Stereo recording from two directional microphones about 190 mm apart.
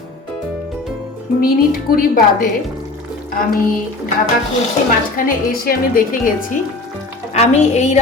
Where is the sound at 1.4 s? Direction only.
50° left (ahead or behind).